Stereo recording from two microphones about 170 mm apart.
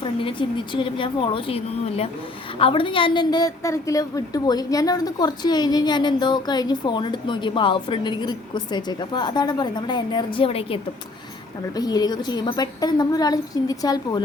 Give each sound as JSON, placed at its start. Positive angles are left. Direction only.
{"t": 0.0, "sound": "a woman's voice", "side_deg": 30}
{"t": 11.8, "sound": "a woman's voice", "side_deg": 25}